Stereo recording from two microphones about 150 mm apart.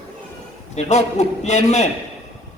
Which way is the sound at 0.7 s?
50° left (ahead or behind).